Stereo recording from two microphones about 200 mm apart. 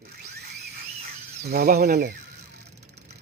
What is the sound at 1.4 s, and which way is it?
Speech, 50° right (ahead or behind).